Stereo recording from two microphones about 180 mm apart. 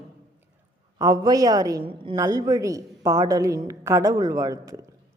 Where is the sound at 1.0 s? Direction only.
20° right (ahead or behind).